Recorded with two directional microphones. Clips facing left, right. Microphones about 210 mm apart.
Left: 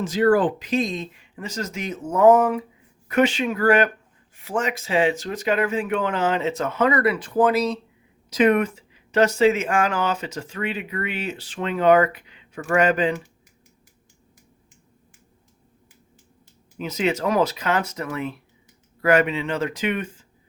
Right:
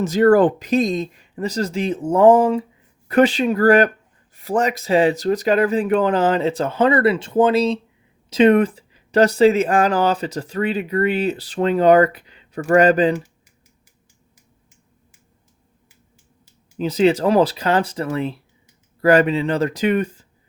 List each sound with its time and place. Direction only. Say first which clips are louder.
0.0 s speech: right 5 dB; 40° right (ahead or behind)
16.7 s speech: right 8 dB; 30° right (ahead or behind)